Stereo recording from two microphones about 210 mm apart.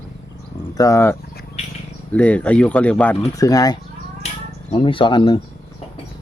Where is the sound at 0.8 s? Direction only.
15° left (ahead or behind).